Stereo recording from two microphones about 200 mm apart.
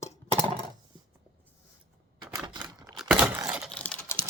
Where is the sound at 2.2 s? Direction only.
20° right (ahead or behind).